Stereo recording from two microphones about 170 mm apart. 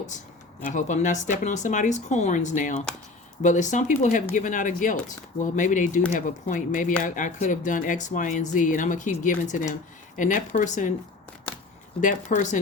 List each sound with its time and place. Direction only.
0.6 s speech: 45° left (ahead or behind)
11.9 s speech: 45° left (ahead or behind)